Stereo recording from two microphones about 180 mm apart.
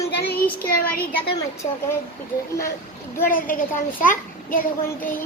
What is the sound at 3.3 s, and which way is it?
A child's voice, 50° left (ahead or behind).